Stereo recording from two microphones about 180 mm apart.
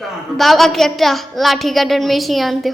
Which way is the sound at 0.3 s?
Centre (ahead or behind).